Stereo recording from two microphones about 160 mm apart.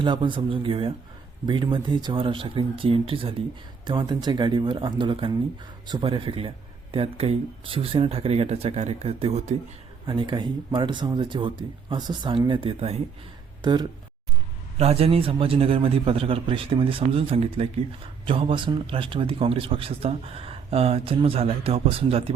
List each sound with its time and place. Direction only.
0.0 s a man's voice: 30° right (ahead or behind)
10.1 s speech: 30° right (ahead or behind)
13.6 s speech: 25° right (ahead or behind)
14.8 s a man's voice: 40° right (ahead or behind)